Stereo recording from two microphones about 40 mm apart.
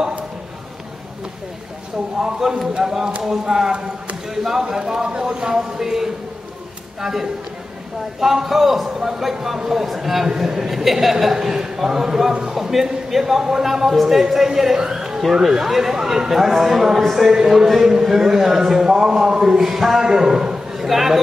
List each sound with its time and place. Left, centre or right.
2.2 s a man's voice: centre
5.5 s a man's voice: centre
20.7 s a sound: centre